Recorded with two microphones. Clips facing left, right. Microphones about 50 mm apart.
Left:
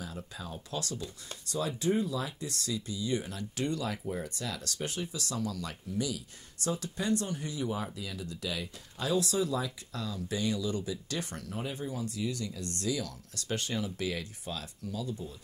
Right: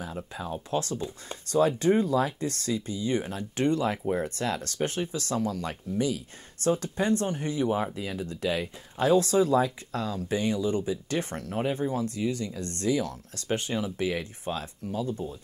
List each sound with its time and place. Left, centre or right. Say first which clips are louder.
0.0 s speech: right 6 dB; right
1.5 s speech: right 8 dB; right